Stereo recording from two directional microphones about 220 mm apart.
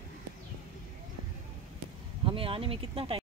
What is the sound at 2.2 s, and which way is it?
Speech, 25° right (ahead or behind).